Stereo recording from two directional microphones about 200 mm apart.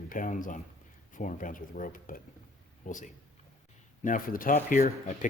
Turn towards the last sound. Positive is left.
turn(degrees=40)  # may be behind; listen again after turning